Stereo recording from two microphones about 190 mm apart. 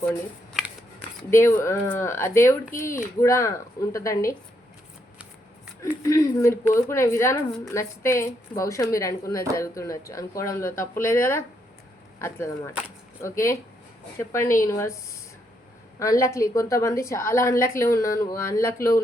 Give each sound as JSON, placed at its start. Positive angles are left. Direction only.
{"t": 1.3, "sound": "a woman's voice", "side_deg": 15}
{"t": 5.8, "sound": "a woman's voice", "side_deg": 15}
{"t": 16.0, "sound": "a woman's voice", "side_deg": 15}